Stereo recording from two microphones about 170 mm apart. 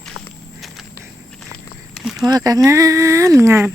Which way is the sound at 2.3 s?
20° right (ahead or behind).